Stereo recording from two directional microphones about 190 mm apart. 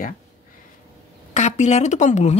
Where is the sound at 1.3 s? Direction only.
35° left (ahead or behind).